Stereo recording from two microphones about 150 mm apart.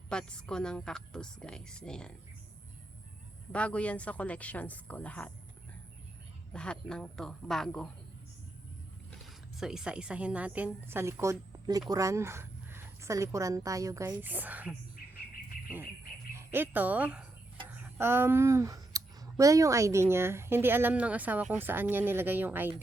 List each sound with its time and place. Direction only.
0.1 s a woman's voice: 5° left (ahead or behind)
3.5 s a woman's voice: 10° left (ahead or behind)
6.5 s a woman's voice: 5° left (ahead or behind)
9.2 s speech: 5° right (ahead or behind)
16.3 s speech: 15° right (ahead or behind)